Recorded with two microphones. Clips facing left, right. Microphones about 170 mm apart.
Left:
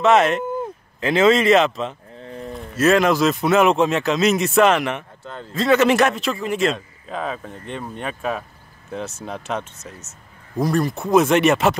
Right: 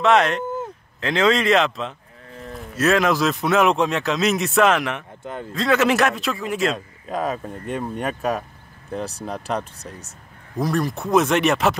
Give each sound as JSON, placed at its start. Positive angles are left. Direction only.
{"t": 0.0, "sound": "speech", "side_deg": 5}
{"t": 5.2, "sound": "speech", "side_deg": -10}
{"t": 5.5, "sound": "speech", "side_deg": 0}